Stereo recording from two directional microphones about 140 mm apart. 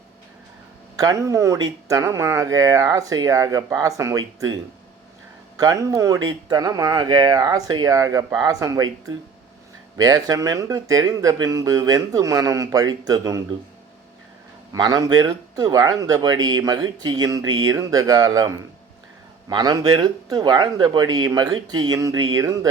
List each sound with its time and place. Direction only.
0.9 s speech: 25° right (ahead or behind)
5.5 s speech: 25° right (ahead or behind)
14.7 s speech: 25° right (ahead or behind)